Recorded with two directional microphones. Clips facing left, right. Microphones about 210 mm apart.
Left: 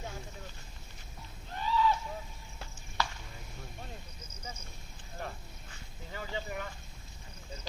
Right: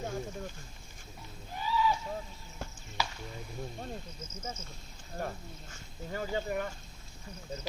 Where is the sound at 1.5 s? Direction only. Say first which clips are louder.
Left 1 dB; 5° right (ahead or behind).